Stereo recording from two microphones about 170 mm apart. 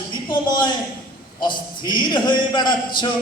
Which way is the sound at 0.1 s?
25° left (ahead or behind).